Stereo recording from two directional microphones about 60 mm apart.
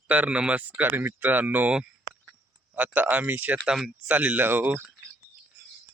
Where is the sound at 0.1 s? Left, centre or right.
Right.